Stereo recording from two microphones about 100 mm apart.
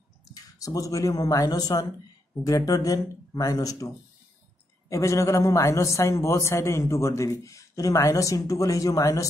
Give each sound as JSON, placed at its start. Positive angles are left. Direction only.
{"t": 0.3, "sound": "a man's voice", "side_deg": 35}